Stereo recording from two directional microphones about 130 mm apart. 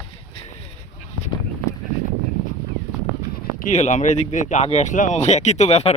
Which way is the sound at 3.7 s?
65° left (ahead or behind).